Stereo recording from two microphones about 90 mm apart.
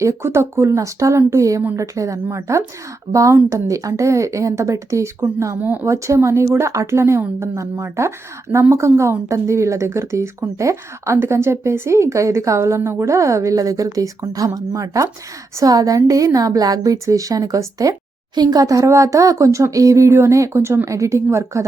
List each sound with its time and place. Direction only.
0.0 s speech: 30° right (ahead or behind)